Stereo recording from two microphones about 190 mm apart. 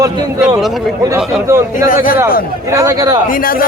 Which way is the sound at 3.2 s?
45° left (ahead or behind).